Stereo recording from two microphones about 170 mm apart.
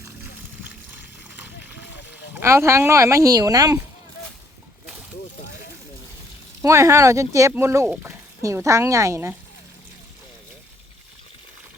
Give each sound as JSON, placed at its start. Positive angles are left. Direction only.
{"t": 1.4, "sound": "a sound", "side_deg": -10}
{"t": 2.3, "sound": "speech", "side_deg": -15}
{"t": 6.6, "sound": "speech", "side_deg": -15}